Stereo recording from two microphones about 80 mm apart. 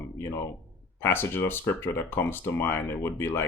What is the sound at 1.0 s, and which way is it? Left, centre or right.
Speech, left.